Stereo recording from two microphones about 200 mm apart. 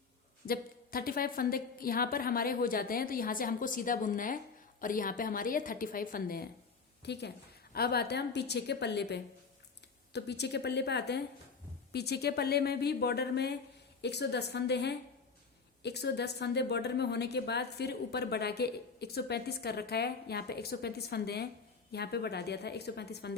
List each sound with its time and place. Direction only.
0.4 s a woman's voice: 50° left (ahead or behind)
7.0 s speech: 55° left (ahead or behind)